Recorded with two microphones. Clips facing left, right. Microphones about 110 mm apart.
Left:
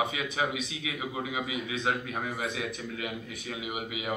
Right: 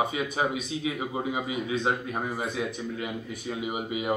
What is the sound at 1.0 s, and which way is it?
Speech, 40° right (ahead or behind).